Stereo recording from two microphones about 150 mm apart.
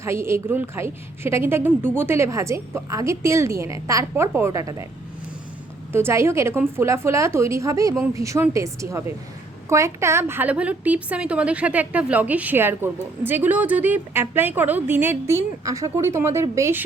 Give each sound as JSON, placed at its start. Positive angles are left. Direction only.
{"t": 0.0, "sound": "a woman's voice", "side_deg": -15}
{"t": 5.9, "sound": "a woman's voice", "side_deg": -15}